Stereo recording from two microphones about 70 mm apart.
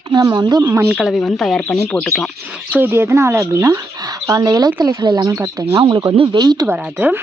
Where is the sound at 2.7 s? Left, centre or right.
Right.